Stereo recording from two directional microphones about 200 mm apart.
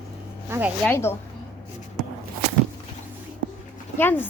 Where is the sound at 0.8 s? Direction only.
10° left (ahead or behind).